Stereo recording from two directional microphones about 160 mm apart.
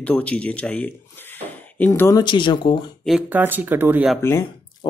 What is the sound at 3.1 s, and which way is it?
Speech, 10° right (ahead or behind).